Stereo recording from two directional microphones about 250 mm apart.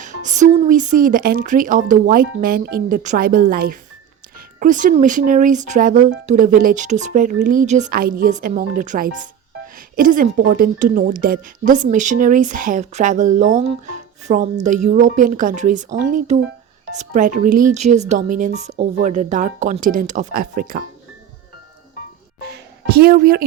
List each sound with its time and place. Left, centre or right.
0.0 s speech: right
22.9 s speech: right